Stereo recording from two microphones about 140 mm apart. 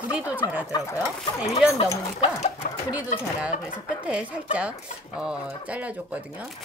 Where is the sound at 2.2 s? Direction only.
50° left (ahead or behind).